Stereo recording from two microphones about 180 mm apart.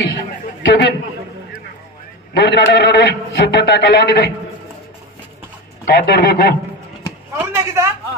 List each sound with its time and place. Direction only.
0.6 s a man's voice: 75° left (ahead or behind)
2.3 s a man's voice: 70° left (ahead or behind)
5.9 s a man's voice: 60° left (ahead or behind)
7.3 s speech: 15° right (ahead or behind)